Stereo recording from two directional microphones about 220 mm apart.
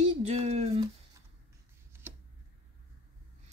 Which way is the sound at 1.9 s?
10° right (ahead or behind).